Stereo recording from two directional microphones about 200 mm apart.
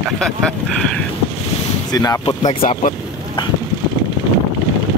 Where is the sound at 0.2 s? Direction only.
5° left (ahead or behind).